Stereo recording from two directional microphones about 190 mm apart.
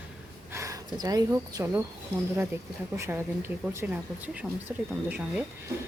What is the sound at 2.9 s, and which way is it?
Speech, 15° right (ahead or behind).